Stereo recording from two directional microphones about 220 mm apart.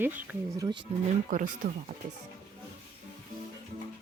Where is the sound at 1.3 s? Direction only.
40° right (ahead or behind).